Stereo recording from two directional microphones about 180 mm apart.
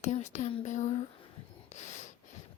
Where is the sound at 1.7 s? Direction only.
40° left (ahead or behind).